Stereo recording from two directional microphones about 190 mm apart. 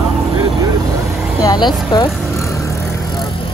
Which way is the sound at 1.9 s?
20° left (ahead or behind).